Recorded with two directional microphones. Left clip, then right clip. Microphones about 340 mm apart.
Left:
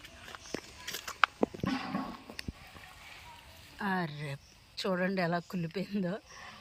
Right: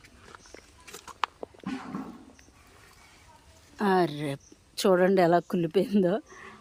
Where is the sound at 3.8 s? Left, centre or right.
Right.